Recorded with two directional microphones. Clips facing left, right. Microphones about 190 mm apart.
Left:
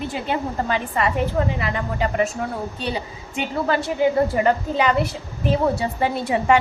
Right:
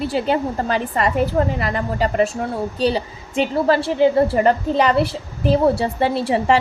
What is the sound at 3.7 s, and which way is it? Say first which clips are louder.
A woman's voice: right 3 dB; 30° right (ahead or behind).